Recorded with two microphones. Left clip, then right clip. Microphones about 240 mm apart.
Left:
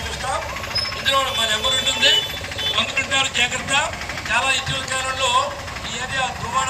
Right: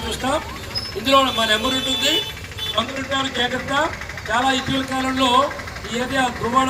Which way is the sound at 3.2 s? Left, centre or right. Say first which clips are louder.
Even; right.